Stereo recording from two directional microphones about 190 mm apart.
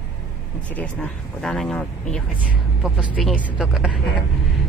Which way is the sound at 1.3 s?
Centre (ahead or behind).